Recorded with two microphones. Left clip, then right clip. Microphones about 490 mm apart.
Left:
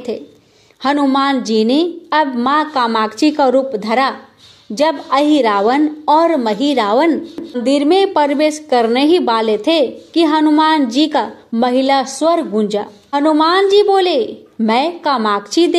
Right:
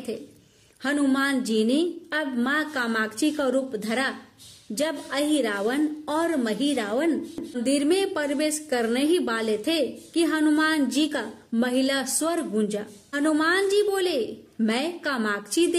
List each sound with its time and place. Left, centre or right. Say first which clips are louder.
0.8 s a woman's voice: left 10 dB; right